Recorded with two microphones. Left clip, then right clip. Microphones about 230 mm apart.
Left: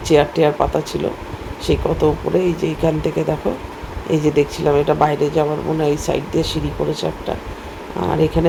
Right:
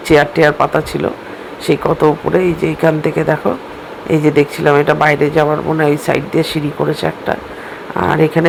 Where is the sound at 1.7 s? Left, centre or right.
Right.